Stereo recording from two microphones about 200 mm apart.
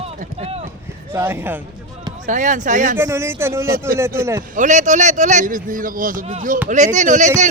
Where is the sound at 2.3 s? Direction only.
40° right (ahead or behind).